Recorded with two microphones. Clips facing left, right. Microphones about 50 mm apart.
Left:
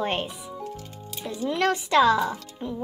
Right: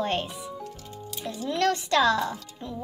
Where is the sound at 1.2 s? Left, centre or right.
Centre.